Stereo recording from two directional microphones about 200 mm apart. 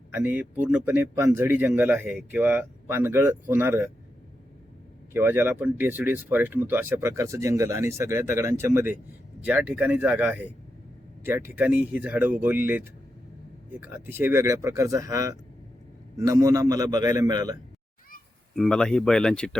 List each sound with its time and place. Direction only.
0.1 s speech: 10° right (ahead or behind)
5.1 s a man's voice: 10° right (ahead or behind)
18.5 s speech: centre (ahead or behind)